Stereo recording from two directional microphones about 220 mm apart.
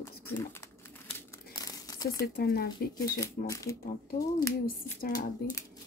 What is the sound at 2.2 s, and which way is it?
Speech, 45° left (ahead or behind).